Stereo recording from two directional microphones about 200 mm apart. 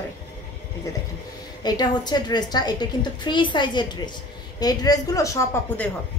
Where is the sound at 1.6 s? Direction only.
20° left (ahead or behind).